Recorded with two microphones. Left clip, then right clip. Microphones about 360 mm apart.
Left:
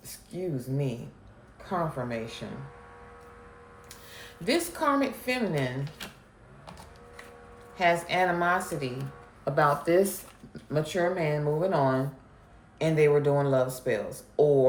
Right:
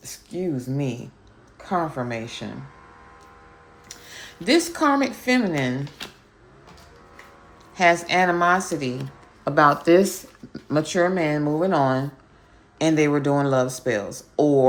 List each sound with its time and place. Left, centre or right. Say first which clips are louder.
0.0 s speech: right 7 dB; right
3.8 s speech: right 8 dB; right
6.0 s a sound: right 5 dB; centre
7.8 s speech: right 6 dB; right